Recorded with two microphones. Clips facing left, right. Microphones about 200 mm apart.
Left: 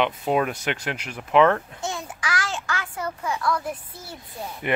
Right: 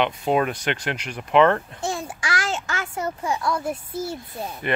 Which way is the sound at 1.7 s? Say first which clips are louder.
Right 3 dB; 30° right (ahead or behind).